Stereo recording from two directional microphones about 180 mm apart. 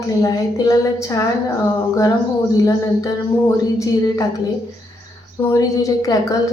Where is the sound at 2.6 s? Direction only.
15° left (ahead or behind).